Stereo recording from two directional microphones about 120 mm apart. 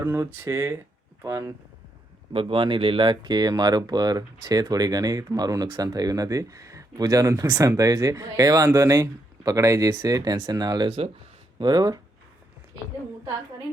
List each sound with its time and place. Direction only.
0.0 s speech: 25° right (ahead or behind)
2.3 s speech: 50° right (ahead or behind)